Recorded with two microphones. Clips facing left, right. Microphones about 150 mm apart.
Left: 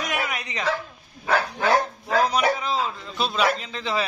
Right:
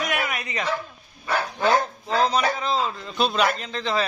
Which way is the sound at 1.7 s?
25° right (ahead or behind).